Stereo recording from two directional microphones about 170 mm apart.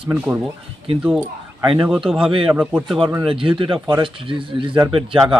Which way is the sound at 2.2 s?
30° right (ahead or behind).